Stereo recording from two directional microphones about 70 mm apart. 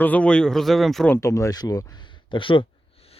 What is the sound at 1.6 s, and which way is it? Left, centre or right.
Speech, left.